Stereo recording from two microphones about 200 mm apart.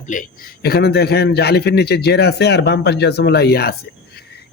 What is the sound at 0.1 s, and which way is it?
A man's voice, 45° left (ahead or behind).